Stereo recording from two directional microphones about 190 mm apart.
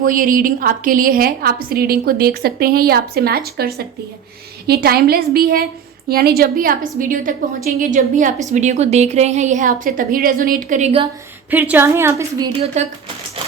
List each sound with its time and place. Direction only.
0.0 s a woman's voice: 45° right (ahead or behind); by 11.1 s 30° right (ahead or behind)
11.5 s a woman's voice: 10° right (ahead or behind)
12.6 s speech: 35° right (ahead or behind)